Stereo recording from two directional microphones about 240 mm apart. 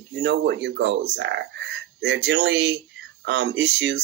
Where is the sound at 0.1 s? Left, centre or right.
Right.